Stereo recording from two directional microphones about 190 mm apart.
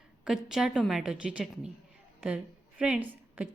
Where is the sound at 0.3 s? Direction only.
Centre (ahead or behind).